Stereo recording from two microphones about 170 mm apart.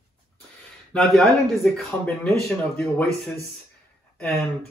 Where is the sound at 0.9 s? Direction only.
Centre (ahead or behind).